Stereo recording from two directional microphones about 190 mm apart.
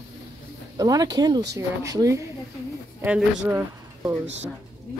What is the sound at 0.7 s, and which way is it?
Speech, 20° right (ahead or behind).